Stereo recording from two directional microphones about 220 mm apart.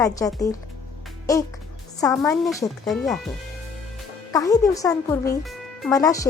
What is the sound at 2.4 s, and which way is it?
Speech, centre (ahead or behind).